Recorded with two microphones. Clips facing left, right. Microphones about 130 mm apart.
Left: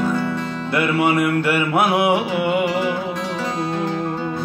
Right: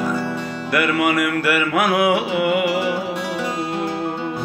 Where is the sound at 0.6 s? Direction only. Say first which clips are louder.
Even; 25° left (ahead or behind).